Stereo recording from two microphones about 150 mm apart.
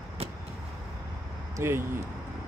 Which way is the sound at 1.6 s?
15° right (ahead or behind).